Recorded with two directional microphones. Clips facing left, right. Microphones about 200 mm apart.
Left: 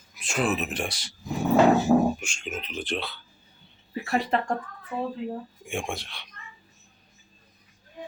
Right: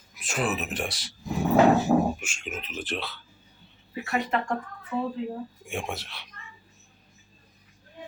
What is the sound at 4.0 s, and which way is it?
Speech, 35° left (ahead or behind).